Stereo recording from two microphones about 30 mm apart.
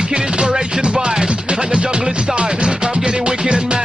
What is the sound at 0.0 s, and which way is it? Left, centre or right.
Music, right.